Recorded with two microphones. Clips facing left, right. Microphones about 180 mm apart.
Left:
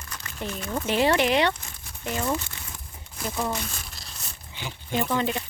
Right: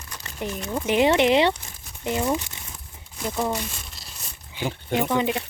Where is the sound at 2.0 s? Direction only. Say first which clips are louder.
Right 3 dB; 15° right (ahead or behind).